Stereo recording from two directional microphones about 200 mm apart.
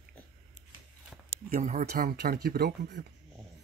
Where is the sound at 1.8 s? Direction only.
50° right (ahead or behind).